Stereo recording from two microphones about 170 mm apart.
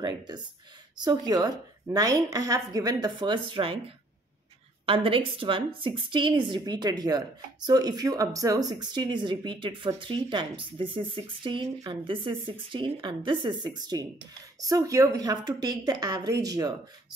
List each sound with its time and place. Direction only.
0.0 s a sound: 25° right (ahead or behind)
0.9 s a woman's voice: 25° right (ahead or behind)
4.8 s a woman's voice: 30° right (ahead or behind)